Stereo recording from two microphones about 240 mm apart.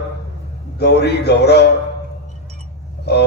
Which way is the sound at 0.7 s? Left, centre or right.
Left.